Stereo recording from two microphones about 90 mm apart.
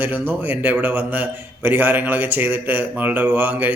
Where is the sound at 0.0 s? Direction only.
20° right (ahead or behind).